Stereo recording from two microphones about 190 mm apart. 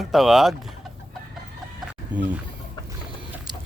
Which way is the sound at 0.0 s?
Centre (ahead or behind).